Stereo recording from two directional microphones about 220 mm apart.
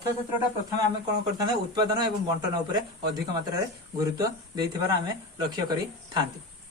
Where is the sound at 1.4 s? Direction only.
20° right (ahead or behind).